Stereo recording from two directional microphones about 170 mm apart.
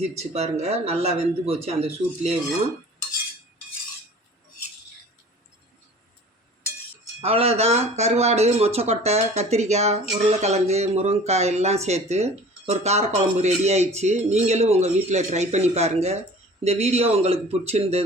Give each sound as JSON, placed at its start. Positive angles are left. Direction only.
{"t": 0.0, "sound": "speech", "side_deg": -40}
{"t": 7.2, "sound": "speech", "side_deg": -35}